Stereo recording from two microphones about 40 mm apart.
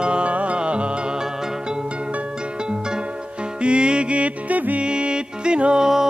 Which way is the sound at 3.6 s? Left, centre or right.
Right.